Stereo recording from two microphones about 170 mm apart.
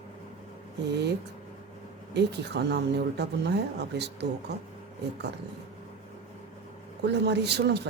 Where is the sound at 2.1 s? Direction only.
85° right.